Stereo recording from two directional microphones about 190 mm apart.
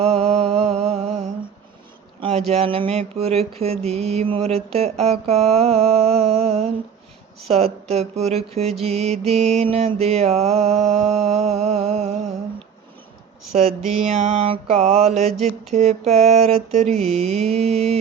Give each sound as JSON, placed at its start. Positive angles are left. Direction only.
{"t": 0.0, "sound": "music", "side_deg": -35}
{"t": 2.5, "sound": "mantra", "side_deg": -30}
{"t": 13.5, "sound": "mantra", "side_deg": -40}